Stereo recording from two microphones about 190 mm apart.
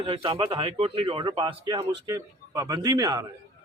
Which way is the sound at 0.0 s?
25° right (ahead or behind).